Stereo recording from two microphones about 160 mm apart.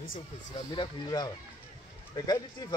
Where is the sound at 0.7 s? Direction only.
30° left (ahead or behind).